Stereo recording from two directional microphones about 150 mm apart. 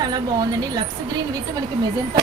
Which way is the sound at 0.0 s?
25° right (ahead or behind).